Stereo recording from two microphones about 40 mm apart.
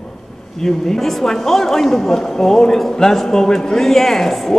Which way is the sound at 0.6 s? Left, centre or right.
Centre.